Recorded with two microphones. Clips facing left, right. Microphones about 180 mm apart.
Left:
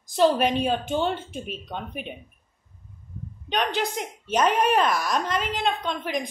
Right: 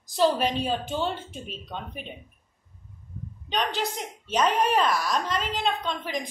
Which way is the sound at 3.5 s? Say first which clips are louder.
Left 2 dB; 55° left (ahead or behind).